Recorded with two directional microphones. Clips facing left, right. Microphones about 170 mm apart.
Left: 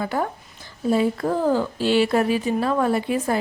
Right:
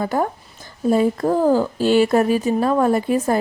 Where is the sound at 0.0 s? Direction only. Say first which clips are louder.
Right 4 dB; 40° right (ahead or behind).